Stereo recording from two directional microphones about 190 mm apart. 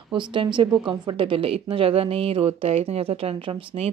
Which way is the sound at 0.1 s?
25° right (ahead or behind).